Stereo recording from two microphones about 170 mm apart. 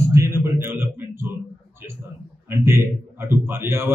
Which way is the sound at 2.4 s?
15° right (ahead or behind).